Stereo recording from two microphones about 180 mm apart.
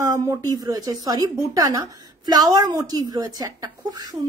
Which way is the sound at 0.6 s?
20° right (ahead or behind).